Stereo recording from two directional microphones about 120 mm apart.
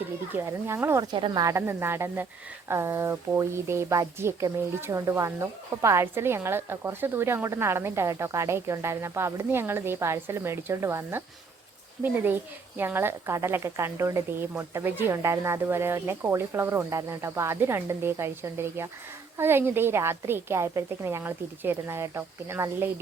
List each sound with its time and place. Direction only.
0.3 s a woman's voice: 20° right (ahead or behind)
1.0 s a woman's voice: 40° right (ahead or behind); by 22.9 s 20° right (ahead or behind)